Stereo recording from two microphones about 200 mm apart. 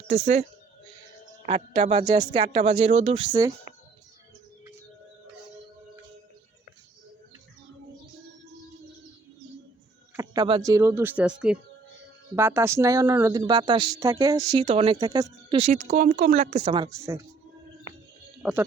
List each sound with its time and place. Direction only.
0.1 s speech: 35° right (ahead or behind)
1.5 s speech: 30° right (ahead or behind)
10.2 s speech: 20° right (ahead or behind); by 16.7 s 35° right (ahead or behind)
16.7 s speech: 20° right (ahead or behind)
18.4 s speech: 5° right (ahead or behind)